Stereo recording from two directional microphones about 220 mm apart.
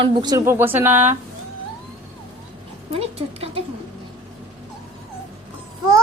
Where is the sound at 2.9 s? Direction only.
25° right (ahead or behind).